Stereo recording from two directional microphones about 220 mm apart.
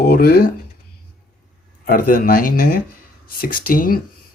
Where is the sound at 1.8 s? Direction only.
40° left (ahead or behind).